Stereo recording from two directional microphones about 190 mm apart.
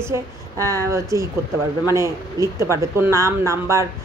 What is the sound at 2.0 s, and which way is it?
Speech, 15° right (ahead or behind).